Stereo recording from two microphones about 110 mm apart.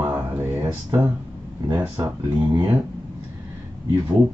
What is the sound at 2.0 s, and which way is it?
Speech, 30° right (ahead or behind).